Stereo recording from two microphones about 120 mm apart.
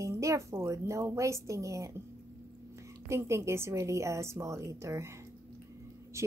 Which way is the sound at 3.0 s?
25° right (ahead or behind).